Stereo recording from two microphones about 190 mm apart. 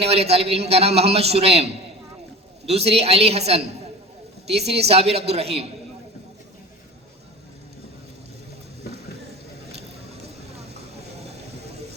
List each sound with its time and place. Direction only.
0.0 s a man's voice: 30° right (ahead or behind)
2.6 s a man's voice: 35° right (ahead or behind)
9.7 s a sound: 35° right (ahead or behind)